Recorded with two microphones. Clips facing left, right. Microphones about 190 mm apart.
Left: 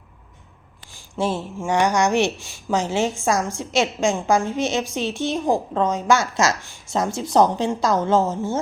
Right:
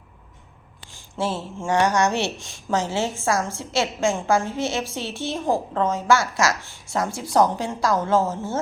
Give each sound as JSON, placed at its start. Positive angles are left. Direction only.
{"t": 1.1, "sound": "speech", "side_deg": 15}